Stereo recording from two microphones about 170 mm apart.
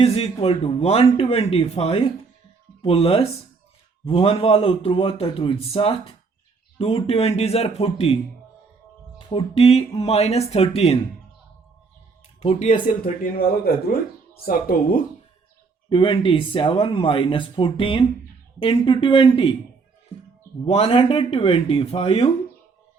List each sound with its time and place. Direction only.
0.0 s a man's voice: 35° left (ahead or behind)
12.4 s speech: 35° left (ahead or behind)
13.2 s speech: 60° left (ahead or behind)
15.9 s speech: 30° left (ahead or behind)
20.7 s a man's voice: 35° left (ahead or behind)